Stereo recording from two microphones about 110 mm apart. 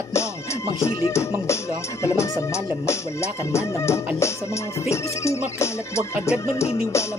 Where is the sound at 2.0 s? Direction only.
25° left (ahead or behind).